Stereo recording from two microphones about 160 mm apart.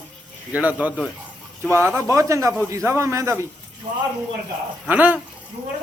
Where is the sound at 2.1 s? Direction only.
20° right (ahead or behind).